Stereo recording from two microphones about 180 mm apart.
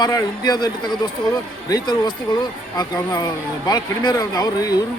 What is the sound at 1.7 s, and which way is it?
Speech, 25° left (ahead or behind).